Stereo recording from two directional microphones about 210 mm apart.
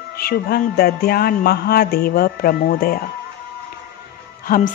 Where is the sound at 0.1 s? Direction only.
45° left (ahead or behind).